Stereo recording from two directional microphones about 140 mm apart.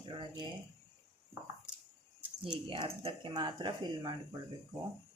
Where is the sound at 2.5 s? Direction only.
35° right (ahead or behind).